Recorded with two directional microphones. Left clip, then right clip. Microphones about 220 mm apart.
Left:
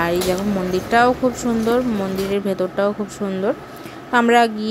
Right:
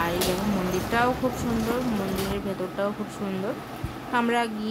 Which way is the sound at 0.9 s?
30° left (ahead or behind).